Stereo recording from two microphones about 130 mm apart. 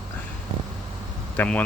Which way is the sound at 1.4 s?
10° left (ahead or behind).